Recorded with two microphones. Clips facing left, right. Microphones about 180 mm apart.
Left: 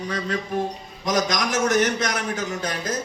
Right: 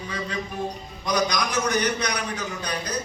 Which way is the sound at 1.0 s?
45° left (ahead or behind).